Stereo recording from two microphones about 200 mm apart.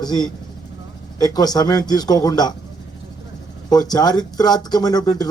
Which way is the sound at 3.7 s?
20° left (ahead or behind).